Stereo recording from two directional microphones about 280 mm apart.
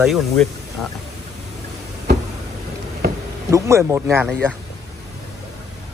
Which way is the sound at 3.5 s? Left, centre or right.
Centre.